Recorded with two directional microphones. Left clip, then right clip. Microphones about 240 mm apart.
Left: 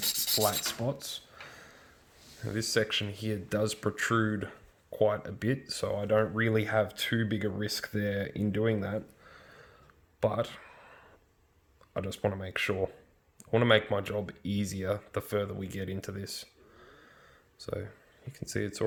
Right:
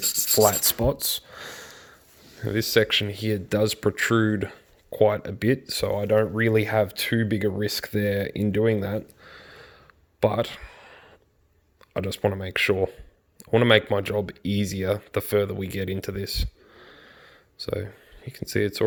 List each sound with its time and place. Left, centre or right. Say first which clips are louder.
0.4 s speech: right 9 dB; right
2.4 s speech: right 8 dB; right
10.2 s a sound: right 7 dB; right
11.9 s speech: right 7 dB; right